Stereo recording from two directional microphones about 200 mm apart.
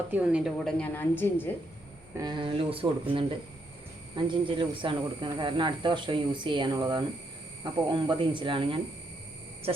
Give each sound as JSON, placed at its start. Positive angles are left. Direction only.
{"t": 0.1, "sound": "a woman's voice", "side_deg": -5}
{"t": 2.1, "sound": "speech", "side_deg": -20}